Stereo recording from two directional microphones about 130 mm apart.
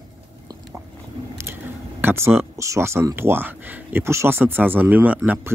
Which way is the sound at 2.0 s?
20° right (ahead or behind).